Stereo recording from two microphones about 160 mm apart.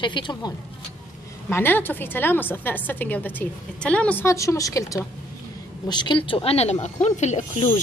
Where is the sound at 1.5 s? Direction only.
10° left (ahead or behind).